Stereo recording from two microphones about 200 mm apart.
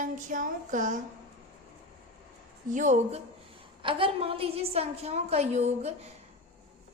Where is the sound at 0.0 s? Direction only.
40° right (ahead or behind).